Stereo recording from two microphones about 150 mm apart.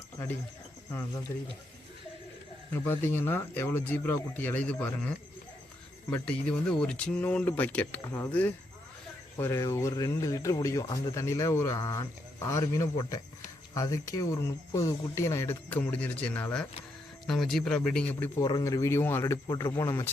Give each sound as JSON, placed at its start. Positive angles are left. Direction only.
{"t": 1.3, "sound": "speech", "side_deg": 15}
{"t": 2.7, "sound": "speech", "side_deg": 15}
{"t": 18.4, "sound": "speech", "side_deg": 25}